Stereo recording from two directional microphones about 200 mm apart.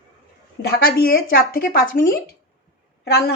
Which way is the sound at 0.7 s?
50° left (ahead or behind).